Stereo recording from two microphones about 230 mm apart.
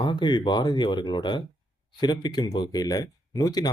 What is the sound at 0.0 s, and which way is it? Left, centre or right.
Speech, centre.